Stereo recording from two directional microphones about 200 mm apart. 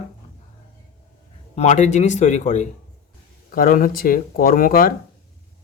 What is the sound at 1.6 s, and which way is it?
Speech, 35° left (ahead or behind).